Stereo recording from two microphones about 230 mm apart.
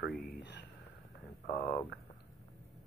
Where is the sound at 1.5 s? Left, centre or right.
Left.